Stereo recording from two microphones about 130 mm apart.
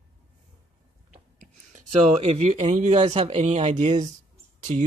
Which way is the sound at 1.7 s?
55° right (ahead or behind).